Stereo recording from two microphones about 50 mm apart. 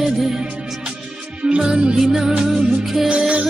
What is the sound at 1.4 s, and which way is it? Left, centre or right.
Music, centre.